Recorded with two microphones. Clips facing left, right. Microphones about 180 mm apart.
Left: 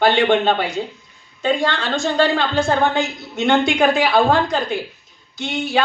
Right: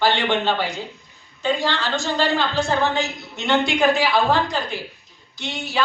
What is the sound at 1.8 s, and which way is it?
A man's voice, 50° left (ahead or behind).